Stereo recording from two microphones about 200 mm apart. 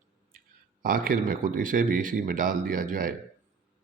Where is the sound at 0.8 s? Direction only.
45° right (ahead or behind).